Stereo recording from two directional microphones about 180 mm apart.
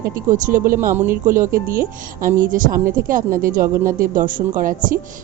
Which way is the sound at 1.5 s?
55° right (ahead or behind).